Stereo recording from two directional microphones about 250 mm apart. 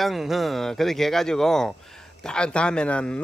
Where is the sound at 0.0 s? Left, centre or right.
Centre.